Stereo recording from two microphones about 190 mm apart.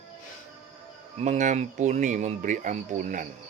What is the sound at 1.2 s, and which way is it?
Speech, 40° right (ahead or behind).